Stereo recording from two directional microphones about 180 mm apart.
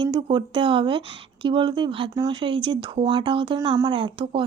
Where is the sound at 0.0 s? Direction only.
25° right (ahead or behind).